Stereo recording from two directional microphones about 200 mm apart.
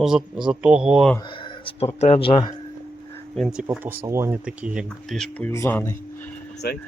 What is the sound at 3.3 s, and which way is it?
Speech, centre (ahead or behind).